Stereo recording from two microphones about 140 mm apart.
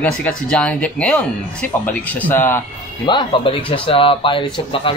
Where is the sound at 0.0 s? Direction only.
10° left (ahead or behind).